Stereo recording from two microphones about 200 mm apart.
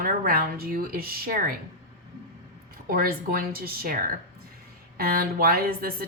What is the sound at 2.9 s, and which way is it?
Speech, 45° right (ahead or behind).